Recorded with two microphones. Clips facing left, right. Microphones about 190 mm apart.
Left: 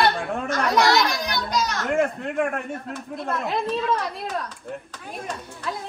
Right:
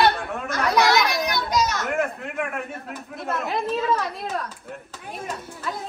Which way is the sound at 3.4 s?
Centre (ahead or behind).